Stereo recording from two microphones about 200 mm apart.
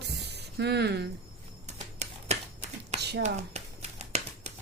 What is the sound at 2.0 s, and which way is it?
Typewriter, 35° right (ahead or behind).